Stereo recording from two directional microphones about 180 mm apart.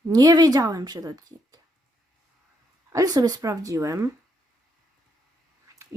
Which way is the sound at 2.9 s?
20° right (ahead or behind).